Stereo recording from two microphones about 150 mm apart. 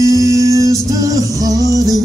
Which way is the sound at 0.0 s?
20° right (ahead or behind).